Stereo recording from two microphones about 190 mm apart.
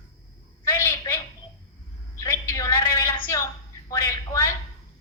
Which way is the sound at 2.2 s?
15° left (ahead or behind).